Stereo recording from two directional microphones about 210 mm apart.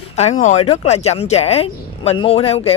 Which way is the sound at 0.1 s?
30° left (ahead or behind).